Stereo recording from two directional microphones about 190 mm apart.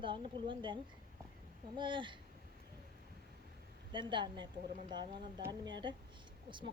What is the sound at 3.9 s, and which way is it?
A woman's voice, 25° right (ahead or behind).